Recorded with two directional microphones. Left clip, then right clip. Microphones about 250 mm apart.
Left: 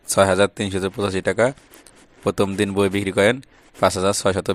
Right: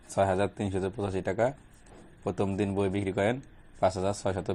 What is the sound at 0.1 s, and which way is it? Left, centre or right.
Speech, left.